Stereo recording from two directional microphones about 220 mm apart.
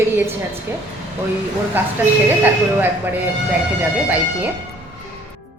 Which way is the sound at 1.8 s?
10° right (ahead or behind).